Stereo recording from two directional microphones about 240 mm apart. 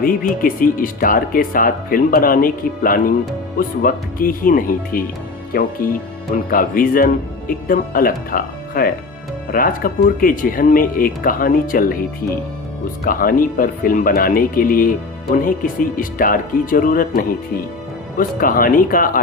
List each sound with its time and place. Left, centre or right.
0.0 s speech: left
13.1 s speech: left